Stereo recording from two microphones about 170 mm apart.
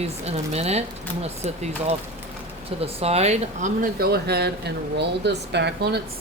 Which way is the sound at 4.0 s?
70° right (ahead or behind).